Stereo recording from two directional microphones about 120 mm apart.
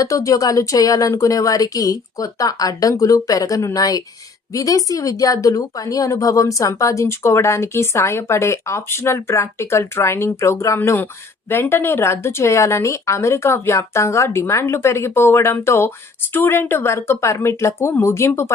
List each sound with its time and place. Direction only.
0.0 s a woman's voice: 30° left (ahead or behind)